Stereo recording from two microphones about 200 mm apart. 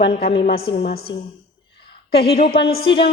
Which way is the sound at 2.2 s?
30° left (ahead or behind).